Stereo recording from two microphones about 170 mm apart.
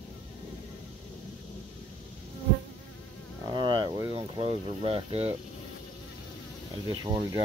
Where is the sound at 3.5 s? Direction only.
30° right (ahead or behind).